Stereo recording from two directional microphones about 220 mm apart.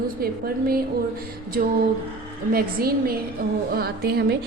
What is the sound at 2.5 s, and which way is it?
A woman's voice, 45° right (ahead or behind).